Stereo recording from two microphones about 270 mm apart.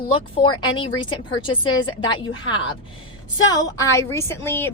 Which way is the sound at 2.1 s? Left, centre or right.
Centre.